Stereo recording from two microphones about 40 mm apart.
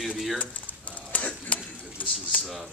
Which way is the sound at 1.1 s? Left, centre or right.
Left.